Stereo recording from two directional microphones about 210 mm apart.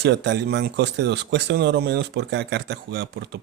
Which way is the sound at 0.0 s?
55° right (ahead or behind).